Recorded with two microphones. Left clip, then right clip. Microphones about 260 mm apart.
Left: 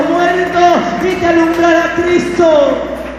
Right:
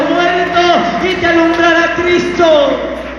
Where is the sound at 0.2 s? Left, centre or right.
Left.